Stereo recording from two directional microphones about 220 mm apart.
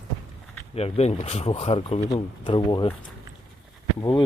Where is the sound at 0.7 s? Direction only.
30° left (ahead or behind).